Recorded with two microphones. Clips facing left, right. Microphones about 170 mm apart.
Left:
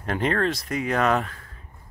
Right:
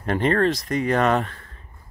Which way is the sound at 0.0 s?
Centre (ahead or behind).